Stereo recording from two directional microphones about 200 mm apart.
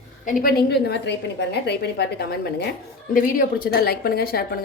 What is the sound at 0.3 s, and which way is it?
A woman's voice, 45° left (ahead or behind).